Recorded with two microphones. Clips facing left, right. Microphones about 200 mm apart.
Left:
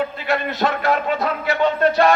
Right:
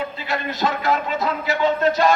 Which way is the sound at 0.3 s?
60° left (ahead or behind).